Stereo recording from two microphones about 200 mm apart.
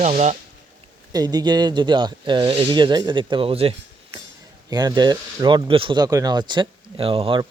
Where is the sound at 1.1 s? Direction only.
20° right (ahead or behind).